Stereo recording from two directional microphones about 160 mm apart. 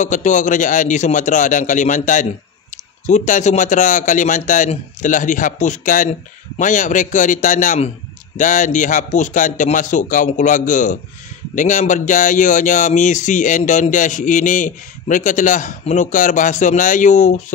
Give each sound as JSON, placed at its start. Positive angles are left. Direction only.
{"t": 0.0, "sound": "speech", "side_deg": 50}